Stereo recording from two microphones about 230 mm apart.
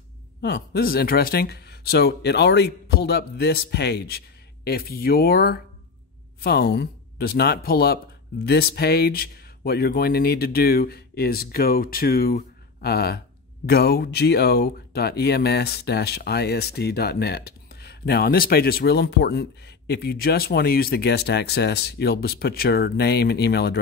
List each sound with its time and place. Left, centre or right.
0.4 s speech: left